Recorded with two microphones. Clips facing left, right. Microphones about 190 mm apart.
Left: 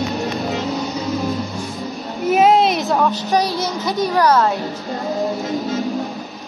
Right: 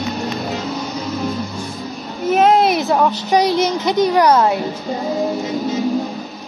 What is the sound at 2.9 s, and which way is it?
A woman's voice, 15° right (ahead or behind).